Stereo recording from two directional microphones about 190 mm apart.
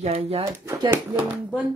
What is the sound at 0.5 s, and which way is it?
Speech, 15° right (ahead or behind).